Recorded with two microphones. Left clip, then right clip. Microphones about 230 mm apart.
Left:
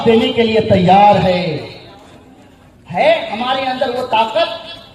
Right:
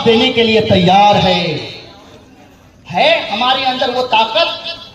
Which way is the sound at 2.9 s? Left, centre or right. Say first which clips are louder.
Right 1 dB; right.